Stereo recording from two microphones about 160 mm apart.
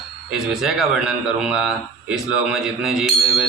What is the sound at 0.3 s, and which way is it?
A man's voice, centre (ahead or behind).